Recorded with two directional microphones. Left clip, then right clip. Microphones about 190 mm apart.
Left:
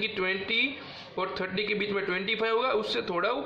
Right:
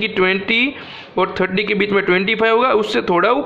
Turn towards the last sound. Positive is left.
turn(degrees=-30)  # may be behind; listen again after turning